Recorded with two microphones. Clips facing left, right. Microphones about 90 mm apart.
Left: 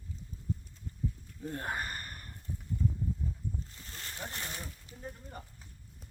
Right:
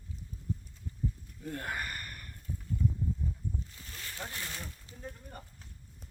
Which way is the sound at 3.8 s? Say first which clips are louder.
Left 2 dB; 25° left (ahead or behind).